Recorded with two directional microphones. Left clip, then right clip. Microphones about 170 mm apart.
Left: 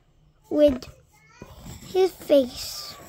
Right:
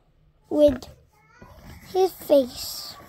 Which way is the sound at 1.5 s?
30° left (ahead or behind).